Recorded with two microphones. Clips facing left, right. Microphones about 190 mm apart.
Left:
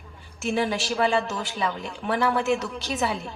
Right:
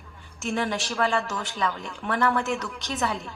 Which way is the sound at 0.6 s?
5° left (ahead or behind).